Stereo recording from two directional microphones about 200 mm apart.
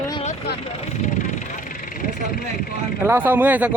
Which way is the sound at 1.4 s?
40° left (ahead or behind).